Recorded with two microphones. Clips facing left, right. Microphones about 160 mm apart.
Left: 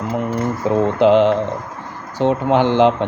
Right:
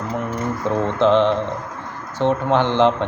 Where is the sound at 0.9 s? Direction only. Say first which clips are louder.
Left 3 dB; 10° left (ahead or behind).